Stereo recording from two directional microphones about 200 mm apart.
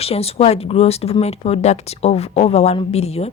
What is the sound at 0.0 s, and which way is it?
Speech, 30° left (ahead or behind).